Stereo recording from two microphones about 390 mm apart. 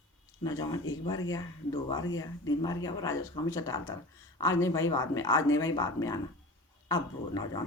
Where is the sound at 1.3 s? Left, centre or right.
Centre.